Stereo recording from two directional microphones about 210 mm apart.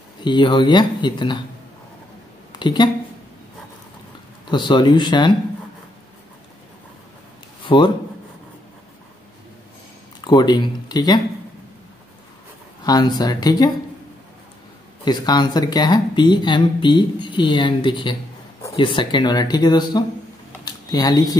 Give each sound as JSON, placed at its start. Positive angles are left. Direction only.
{"t": 0.2, "sound": "speech", "side_deg": 20}
{"t": 2.6, "sound": "speech", "side_deg": 20}
{"t": 4.5, "sound": "speech", "side_deg": 20}
{"t": 7.6, "sound": "speech", "side_deg": 20}
{"t": 10.2, "sound": "speech", "side_deg": 20}
{"t": 12.8, "sound": "speech", "side_deg": 20}
{"t": 15.0, "sound": "speech", "side_deg": 20}
{"t": 20.6, "sound": "a sound", "side_deg": 20}